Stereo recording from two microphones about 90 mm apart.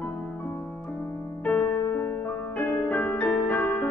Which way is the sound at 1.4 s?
20° left (ahead or behind).